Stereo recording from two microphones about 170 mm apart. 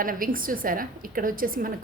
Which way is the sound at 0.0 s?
55° right (ahead or behind).